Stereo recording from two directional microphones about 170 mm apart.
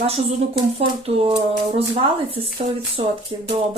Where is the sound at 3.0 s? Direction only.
35° right (ahead or behind).